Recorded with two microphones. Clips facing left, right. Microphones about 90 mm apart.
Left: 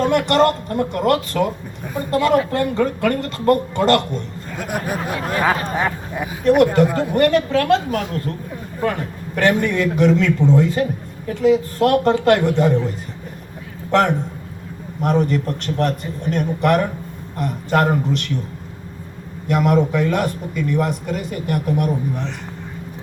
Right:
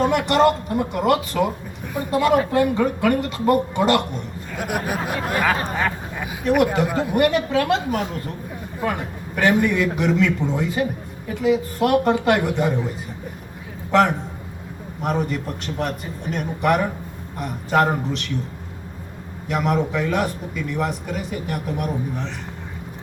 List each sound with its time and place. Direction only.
0.0 s a man's voice: 5° right (ahead or behind)
5.7 s speech: 20° left (ahead or behind)
6.2 s a man's voice: 5° right (ahead or behind)
15.0 s a man's voice: 5° right (ahead or behind)
19.5 s a man's voice: centre (ahead or behind)